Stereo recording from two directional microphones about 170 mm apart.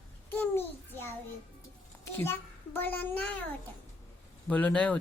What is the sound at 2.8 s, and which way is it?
Speech, 10° left (ahead or behind).